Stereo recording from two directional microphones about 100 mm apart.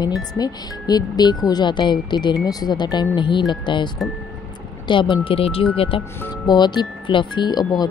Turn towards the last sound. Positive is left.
turn(degrees=45)  # may be behind; listen again after turning